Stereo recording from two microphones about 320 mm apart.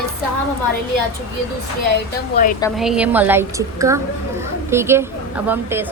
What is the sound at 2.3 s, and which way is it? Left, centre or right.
Speech, left.